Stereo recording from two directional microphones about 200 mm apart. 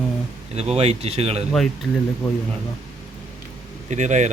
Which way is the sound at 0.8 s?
30° right (ahead or behind).